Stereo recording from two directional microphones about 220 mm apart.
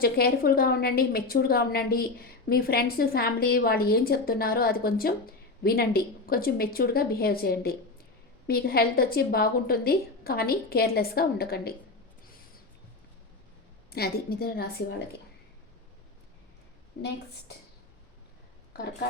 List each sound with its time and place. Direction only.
0.0 s a woman's voice: 45° left (ahead or behind)
13.9 s a woman's voice: 45° left (ahead or behind)
16.9 s a woman's voice: 45° left (ahead or behind)